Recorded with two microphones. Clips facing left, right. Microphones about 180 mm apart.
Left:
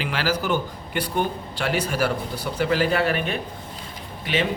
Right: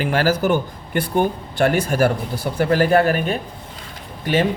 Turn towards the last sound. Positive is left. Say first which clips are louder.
# right 5 dB
turn(degrees=-45)  # may be behind; listen again after turning